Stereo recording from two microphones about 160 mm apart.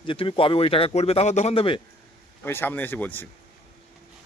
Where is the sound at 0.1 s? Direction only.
35° left (ahead or behind).